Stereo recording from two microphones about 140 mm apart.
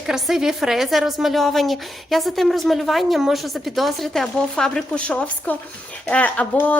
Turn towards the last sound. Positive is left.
turn(degrees=10)  # may be behind; listen again after turning